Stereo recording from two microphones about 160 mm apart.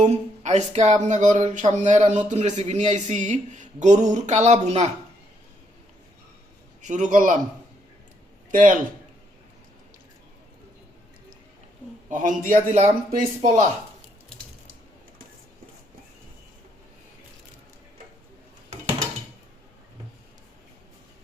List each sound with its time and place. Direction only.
0.0 s speech: 45° right (ahead or behind)
6.8 s speech: 50° right (ahead or behind)
8.4 s speech: 55° right (ahead or behind)
12.1 s speech: 55° right (ahead or behind)
13.1 s speech: 60° right (ahead or behind)